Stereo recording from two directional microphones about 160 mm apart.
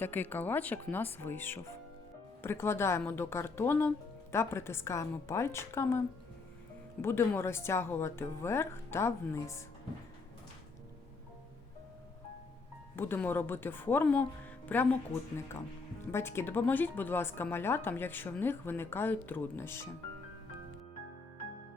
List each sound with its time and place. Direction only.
0.0 s a woman's voice: 10° left (ahead or behind)
7.0 s a woman's voice: 15° left (ahead or behind)
13.0 s a woman's voice: 15° left (ahead or behind)
16.1 s a woman's voice: 15° left (ahead or behind)